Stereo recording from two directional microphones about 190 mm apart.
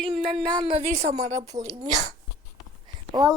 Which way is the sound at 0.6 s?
30° right (ahead or behind).